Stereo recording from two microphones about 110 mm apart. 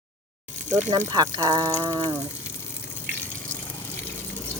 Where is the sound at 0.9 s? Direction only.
40° right (ahead or behind).